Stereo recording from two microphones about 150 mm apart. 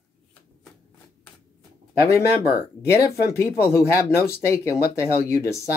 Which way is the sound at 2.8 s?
20° left (ahead or behind).